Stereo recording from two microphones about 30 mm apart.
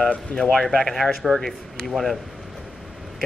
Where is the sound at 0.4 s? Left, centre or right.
Centre.